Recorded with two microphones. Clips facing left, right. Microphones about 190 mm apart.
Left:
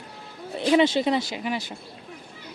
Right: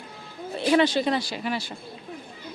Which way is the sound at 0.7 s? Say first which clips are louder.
Left 1 dB; 20° left (ahead or behind).